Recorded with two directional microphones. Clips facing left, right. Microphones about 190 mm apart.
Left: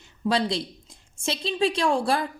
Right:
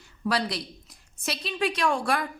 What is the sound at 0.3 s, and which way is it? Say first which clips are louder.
A woman's voice: left 4 dB; 25° left (ahead or behind).